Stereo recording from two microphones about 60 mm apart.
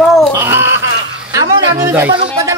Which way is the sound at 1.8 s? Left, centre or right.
Right.